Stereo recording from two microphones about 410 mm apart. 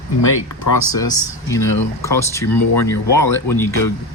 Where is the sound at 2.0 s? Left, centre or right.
Centre.